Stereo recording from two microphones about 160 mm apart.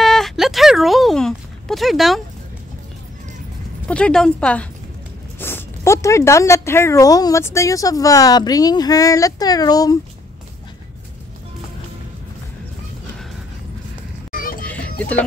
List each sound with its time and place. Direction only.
0.0 s a sound: centre (ahead or behind)
3.8 s speech: 5° left (ahead or behind); by 9.9 s 25° left (ahead or behind)
14.3 s music: 65° left (ahead or behind)
14.6 s music: 10° left (ahead or behind)